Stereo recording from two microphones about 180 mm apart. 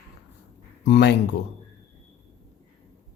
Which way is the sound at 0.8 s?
70° left (ahead or behind).